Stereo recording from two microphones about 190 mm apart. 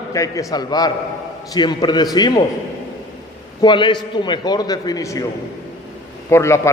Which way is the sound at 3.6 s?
25° left (ahead or behind).